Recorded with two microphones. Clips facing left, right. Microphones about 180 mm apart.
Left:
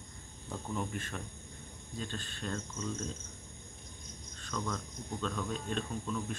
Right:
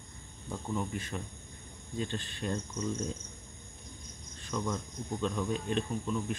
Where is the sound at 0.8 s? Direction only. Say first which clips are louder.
Right 2 dB; 10° right (ahead or behind).